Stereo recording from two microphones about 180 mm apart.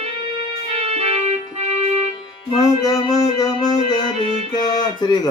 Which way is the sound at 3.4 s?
20° left (ahead or behind).